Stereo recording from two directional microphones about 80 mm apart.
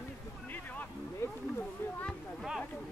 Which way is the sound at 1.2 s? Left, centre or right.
Left.